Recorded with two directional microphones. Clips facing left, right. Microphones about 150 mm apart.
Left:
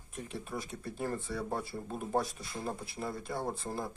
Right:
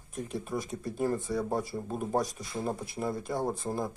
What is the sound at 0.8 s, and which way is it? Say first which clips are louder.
Speech: right 7 dB; 15° right (ahead or behind).